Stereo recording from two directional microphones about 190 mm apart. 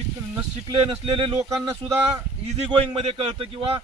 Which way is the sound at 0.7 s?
25° right (ahead or behind).